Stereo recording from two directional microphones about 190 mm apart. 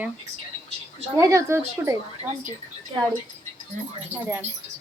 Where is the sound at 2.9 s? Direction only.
20° right (ahead or behind).